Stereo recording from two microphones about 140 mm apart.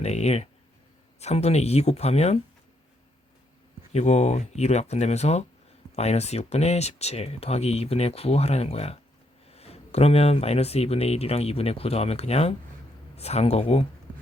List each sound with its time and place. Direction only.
0.0 s speech: 50° left (ahead or behind)
3.9 s speech: 50° left (ahead or behind)